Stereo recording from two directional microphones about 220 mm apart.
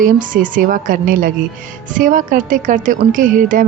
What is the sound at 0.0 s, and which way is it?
Speech, 40° right (ahead or behind).